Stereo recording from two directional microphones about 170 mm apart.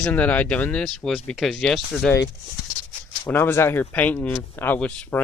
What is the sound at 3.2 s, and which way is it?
Speech, 15° left (ahead or behind).